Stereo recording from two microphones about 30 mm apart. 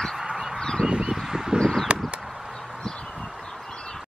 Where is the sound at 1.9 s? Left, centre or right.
Right.